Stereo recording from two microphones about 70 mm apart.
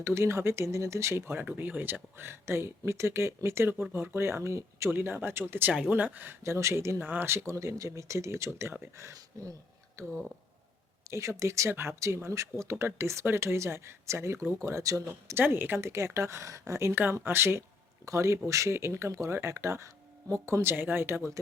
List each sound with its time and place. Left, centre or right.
0.0 s speech: right
4.9 s speech: right
6.4 s speech: right
7.0 s speech: right
10.0 s speech: right
15.4 s speech: right
16.9 s speech: right
18.0 s speech: right